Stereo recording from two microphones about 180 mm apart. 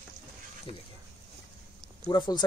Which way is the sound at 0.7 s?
35° left (ahead or behind).